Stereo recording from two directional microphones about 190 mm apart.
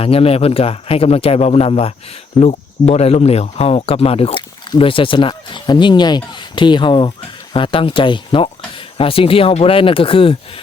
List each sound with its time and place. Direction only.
0.0 s speech: 30° left (ahead or behind)